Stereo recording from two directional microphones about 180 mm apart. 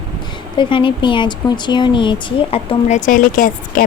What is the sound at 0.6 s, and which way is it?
Speech, 30° left (ahead or behind).